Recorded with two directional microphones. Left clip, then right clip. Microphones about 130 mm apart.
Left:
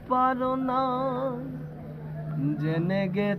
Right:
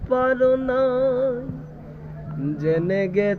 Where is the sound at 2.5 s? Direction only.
25° left (ahead or behind).